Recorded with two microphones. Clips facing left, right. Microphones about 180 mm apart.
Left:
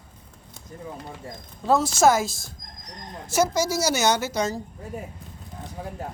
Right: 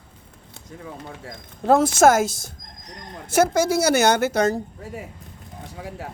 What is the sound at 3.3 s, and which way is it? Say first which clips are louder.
A woman's voice: right 4 dB; 55° right (ahead or behind).